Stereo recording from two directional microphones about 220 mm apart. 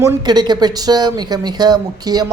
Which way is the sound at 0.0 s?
20° right (ahead or behind).